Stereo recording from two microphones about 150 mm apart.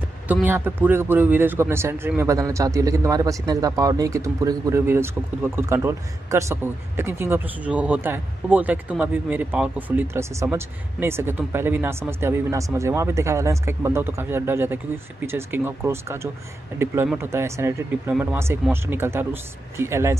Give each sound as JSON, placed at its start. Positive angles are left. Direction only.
{"t": 0.3, "sound": "a man's voice", "side_deg": -10}